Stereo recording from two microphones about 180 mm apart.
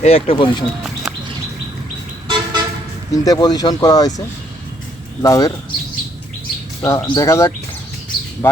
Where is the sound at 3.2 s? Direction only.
20° left (ahead or behind).